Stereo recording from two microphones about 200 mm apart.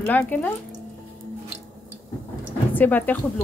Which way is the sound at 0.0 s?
10° left (ahead or behind).